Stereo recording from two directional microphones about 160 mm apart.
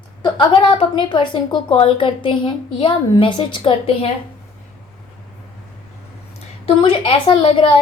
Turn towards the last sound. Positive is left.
turn(degrees=30)  # may be behind; listen again after turning